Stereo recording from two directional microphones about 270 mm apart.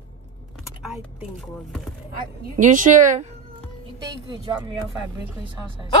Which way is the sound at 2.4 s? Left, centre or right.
Right.